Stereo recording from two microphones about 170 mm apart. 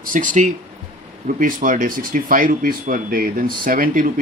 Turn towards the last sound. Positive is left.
turn(degrees=-55)  # may be behind; listen again after turning